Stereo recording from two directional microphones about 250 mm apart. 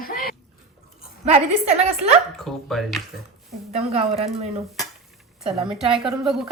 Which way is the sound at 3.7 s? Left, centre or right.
Right.